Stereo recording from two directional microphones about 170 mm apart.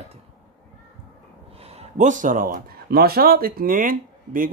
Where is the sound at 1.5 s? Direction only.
35° right (ahead or behind).